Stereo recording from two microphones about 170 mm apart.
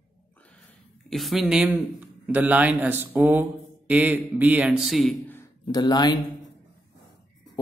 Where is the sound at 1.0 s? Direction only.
Centre (ahead or behind).